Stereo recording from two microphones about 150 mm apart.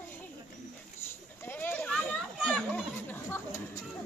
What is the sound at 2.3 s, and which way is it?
Children playing, 5° left (ahead or behind).